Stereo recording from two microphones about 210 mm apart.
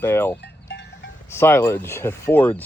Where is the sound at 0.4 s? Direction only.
55° left (ahead or behind).